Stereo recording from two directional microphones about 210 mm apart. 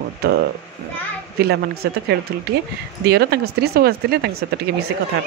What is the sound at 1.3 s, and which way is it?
Speech, 50° right (ahead or behind).